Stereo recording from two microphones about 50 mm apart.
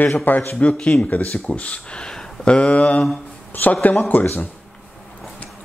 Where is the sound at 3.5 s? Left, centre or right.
Left.